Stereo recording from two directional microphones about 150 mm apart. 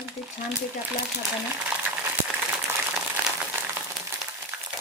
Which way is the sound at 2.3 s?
10° right (ahead or behind).